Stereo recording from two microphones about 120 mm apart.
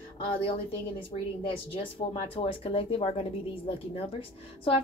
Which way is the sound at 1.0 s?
50° left (ahead or behind).